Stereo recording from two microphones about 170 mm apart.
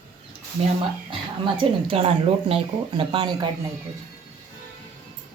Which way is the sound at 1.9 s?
30° right (ahead or behind).